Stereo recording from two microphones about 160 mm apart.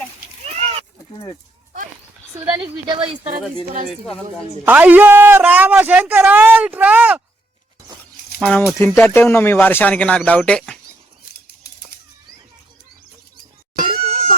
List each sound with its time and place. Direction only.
0.5 s sheep: 40° right (ahead or behind)
2.9 s speech: 35° right (ahead or behind)
4.6 s a man's voice: 10° right (ahead or behind)
8.4 s speech: 10° left (ahead or behind)
14.1 s a sound: 40° right (ahead or behind)